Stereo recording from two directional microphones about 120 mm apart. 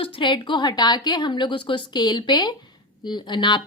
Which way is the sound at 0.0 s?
45° left (ahead or behind).